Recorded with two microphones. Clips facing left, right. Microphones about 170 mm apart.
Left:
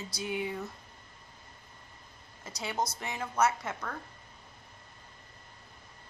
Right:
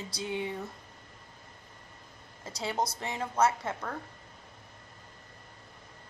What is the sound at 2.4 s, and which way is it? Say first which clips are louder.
A woman's voice: right 2 dB; 30° right (ahead or behind).